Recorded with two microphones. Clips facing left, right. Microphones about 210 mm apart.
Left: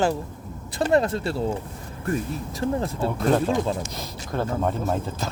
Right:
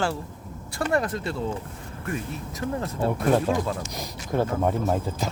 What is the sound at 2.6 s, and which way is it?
Speech, 30° left (ahead or behind).